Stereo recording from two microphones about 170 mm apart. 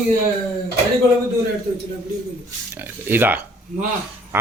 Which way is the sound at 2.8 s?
10° right (ahead or behind).